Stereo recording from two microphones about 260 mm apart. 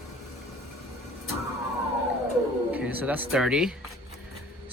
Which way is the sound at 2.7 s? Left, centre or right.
Centre.